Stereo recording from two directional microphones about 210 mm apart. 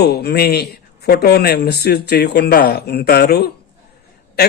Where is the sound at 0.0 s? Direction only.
50° left (ahead or behind).